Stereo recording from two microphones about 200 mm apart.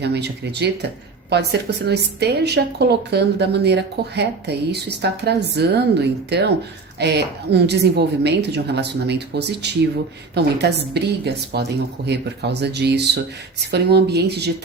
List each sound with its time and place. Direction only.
0.0 s a woman's voice: 55° right (ahead or behind)
1.9 s a woman's voice: 55° right (ahead or behind)